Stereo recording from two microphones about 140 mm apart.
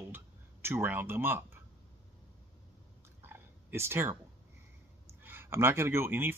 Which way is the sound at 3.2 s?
15° right (ahead or behind).